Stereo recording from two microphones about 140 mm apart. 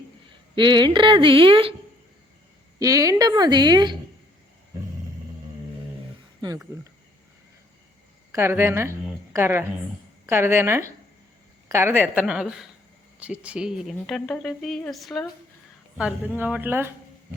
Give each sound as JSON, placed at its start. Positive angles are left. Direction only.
{"t": 0.5, "sound": "speech", "side_deg": -35}
{"t": 2.7, "sound": "a woman's voice", "side_deg": -25}
{"t": 8.3, "sound": "a woman's voice", "side_deg": -15}
{"t": 16.0, "sound": "a woman's voice", "side_deg": -10}